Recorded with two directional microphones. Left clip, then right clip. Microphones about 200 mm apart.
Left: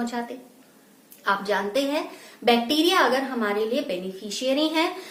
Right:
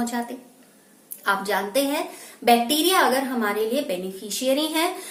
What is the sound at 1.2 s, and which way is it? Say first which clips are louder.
A woman's voice: right 1 dB; 15° right (ahead or behind).